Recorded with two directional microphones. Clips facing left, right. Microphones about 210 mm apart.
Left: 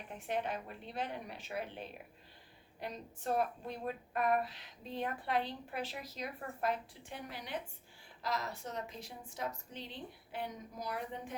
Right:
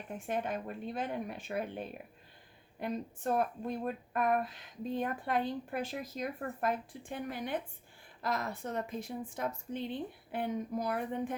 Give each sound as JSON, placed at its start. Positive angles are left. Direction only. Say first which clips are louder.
{"t": 0.1, "sound": "a woman's voice", "louder": "right 2 dB", "side_deg": -50}